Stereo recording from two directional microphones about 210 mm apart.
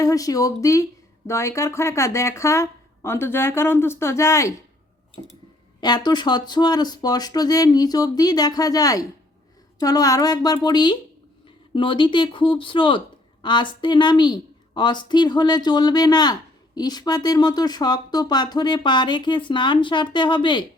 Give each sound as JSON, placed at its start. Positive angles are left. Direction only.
{"t": 0.0, "sound": "speech", "side_deg": 15}
{"t": 5.8, "sound": "speech", "side_deg": 20}